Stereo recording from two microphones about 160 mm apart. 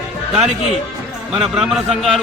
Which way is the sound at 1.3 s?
5° right (ahead or behind).